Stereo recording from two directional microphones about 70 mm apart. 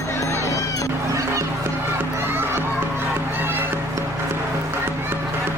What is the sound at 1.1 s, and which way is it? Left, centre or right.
Music, right.